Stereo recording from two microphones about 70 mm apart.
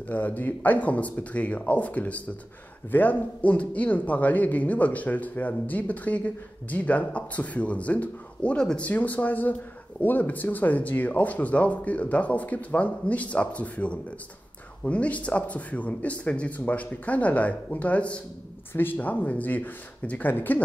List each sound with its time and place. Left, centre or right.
0.1 s speech: left
18.7 s speech: left